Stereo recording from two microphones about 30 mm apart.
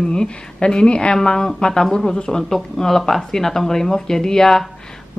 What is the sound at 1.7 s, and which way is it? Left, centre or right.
Speech, centre.